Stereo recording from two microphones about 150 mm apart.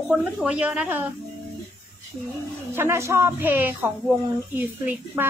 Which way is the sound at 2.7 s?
15° right (ahead or behind).